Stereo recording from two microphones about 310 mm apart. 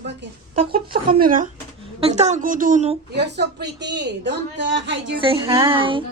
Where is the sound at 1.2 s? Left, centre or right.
Right.